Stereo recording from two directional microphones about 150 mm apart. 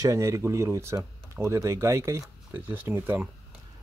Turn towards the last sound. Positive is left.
turn(degrees=-10)  # may be behind; listen again after turning